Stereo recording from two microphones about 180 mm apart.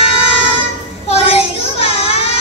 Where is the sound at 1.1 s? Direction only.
35° left (ahead or behind).